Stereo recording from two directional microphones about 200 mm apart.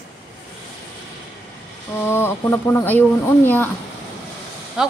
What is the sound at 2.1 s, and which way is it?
Speech, 10° left (ahead or behind).